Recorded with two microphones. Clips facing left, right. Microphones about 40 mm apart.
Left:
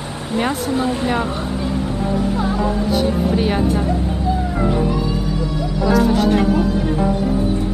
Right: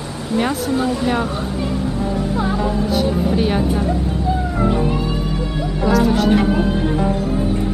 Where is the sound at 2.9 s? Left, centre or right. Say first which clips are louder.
Even; centre.